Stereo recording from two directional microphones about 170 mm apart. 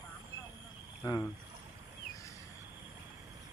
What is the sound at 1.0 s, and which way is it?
Speech, 15° left (ahead or behind).